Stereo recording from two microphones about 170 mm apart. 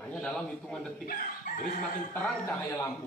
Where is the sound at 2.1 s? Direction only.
10° left (ahead or behind).